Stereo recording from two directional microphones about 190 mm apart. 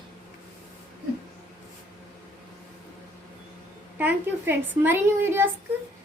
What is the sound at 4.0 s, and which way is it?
A woman's voice, 10° right (ahead or behind).